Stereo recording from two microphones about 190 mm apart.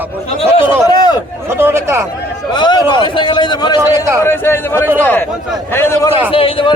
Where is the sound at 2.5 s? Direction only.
25° left (ahead or behind).